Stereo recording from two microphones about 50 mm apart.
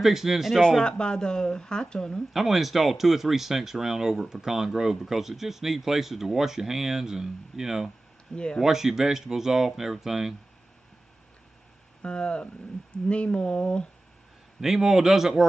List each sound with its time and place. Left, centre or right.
0.0 s speech: centre
0.6 s speech: centre
2.3 s speech: centre
8.3 s speech: centre
8.6 s speech: centre
12.0 s speech: left
14.6 s speech: centre